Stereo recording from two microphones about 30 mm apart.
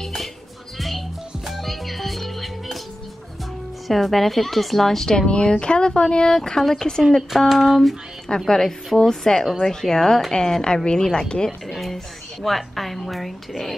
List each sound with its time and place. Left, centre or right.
0.0 s music: centre
3.8 s a woman's voice: centre
5.1 s speech: left
6.3 s a woman's voice: centre
7.0 s a woman's voice: centre
8.5 s a woman's voice: centre
11.6 s a woman's voice: centre